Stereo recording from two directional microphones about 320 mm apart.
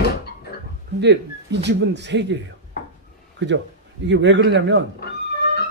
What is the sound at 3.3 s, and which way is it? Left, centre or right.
A man's voice, right.